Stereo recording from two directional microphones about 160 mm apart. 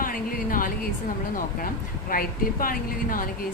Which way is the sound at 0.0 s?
60° left (ahead or behind).